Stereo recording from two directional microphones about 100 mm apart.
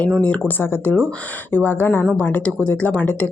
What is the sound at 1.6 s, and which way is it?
Speech, 20° left (ahead or behind).